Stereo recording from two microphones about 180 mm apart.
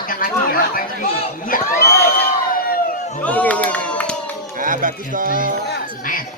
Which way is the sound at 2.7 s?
45° left (ahead or behind).